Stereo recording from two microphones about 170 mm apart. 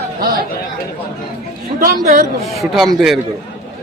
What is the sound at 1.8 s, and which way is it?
Speech, 55° right (ahead or behind).